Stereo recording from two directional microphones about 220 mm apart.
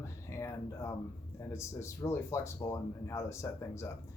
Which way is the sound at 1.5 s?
10° left (ahead or behind).